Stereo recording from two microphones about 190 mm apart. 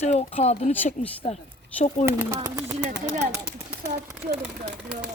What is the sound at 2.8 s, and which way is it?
Speech, 40° right (ahead or behind).